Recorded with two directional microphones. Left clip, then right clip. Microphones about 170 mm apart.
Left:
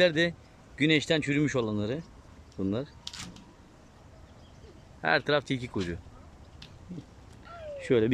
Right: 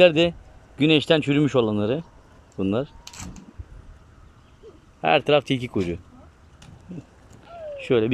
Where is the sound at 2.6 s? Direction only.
5° right (ahead or behind).